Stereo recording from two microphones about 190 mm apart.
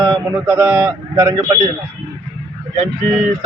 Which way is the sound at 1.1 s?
20° right (ahead or behind).